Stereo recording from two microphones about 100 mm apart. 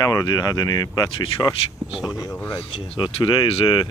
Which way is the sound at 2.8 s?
50° left (ahead or behind).